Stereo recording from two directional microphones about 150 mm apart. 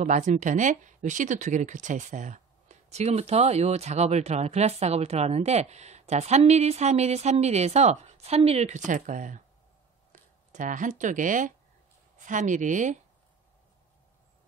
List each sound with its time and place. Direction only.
0.0 s speech: 55° right (ahead or behind)
10.5 s speech: 60° right (ahead or behind)